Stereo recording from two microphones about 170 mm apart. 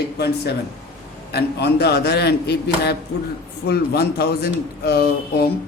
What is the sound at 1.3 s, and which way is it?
Speech, 75° left (ahead or behind).